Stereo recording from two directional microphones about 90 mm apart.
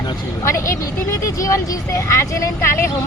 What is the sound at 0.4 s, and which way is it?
Speech, 35° left (ahead or behind).